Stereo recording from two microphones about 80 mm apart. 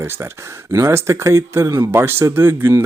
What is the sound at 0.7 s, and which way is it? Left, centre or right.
Speech, right.